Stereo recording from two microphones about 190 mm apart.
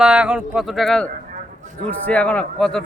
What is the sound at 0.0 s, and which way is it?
A man's voice, 5° right (ahead or behind).